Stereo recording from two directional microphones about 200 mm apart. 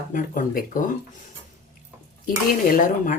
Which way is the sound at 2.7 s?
40° left (ahead or behind).